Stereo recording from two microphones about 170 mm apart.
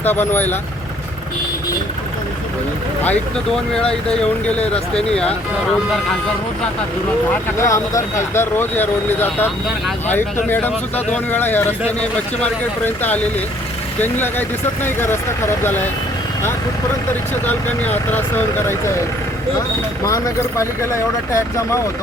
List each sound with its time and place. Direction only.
0.0 s speech: 10° left (ahead or behind)
3.0 s speech: 5° left (ahead or behind)
7.6 s speech: 15° left (ahead or behind)
10.5 s speech: 10° left (ahead or behind)
17.4 s speech: 10° left (ahead or behind)
20.1 s speech: 20° left (ahead or behind)